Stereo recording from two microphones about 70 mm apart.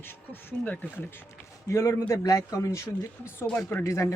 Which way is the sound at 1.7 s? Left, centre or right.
Left.